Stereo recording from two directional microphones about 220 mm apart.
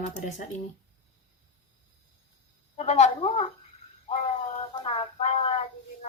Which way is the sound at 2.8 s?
30° left (ahead or behind).